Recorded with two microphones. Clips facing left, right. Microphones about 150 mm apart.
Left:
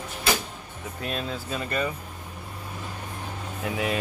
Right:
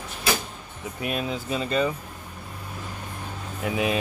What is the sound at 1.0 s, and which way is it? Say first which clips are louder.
Speech: right 3 dB; 10° right (ahead or behind).